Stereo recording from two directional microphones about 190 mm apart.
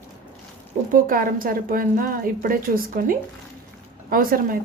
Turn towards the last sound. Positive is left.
turn(degrees=-50)  # may be behind; listen again after turning